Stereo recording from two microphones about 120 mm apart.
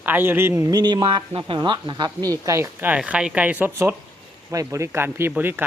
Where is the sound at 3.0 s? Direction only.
5° right (ahead or behind).